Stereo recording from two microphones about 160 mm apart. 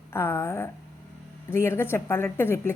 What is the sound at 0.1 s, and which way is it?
A woman's voice, 15° left (ahead or behind).